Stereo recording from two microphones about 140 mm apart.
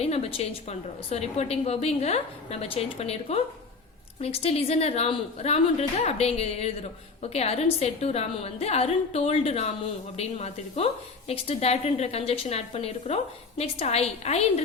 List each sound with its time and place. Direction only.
0.0 s a woman's voice: 45° left (ahead or behind)